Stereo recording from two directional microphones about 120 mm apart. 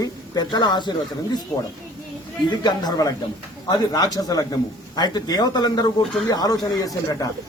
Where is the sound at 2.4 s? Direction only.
35° left (ahead or behind).